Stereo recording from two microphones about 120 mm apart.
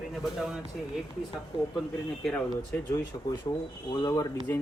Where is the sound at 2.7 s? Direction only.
15° left (ahead or behind).